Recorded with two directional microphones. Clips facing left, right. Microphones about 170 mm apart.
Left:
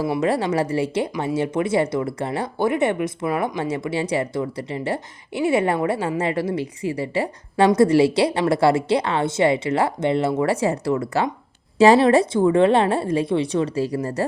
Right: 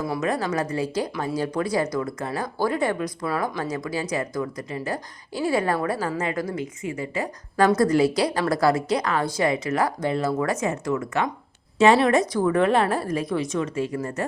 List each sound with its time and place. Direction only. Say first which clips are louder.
0.0 s speech: left 4 dB; 30° left (ahead or behind)